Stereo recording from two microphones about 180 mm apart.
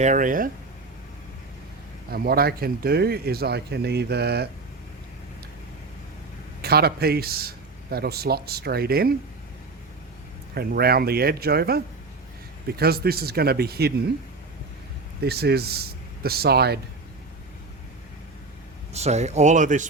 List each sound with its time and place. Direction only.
0.0 s speech: 45° right (ahead or behind)
2.0 s speech: 55° right (ahead or behind)
6.6 s speech: 60° right (ahead or behind)
10.5 s speech: 60° right (ahead or behind)
15.2 s speech: 60° right (ahead or behind)
18.9 s speech: 35° right (ahead or behind)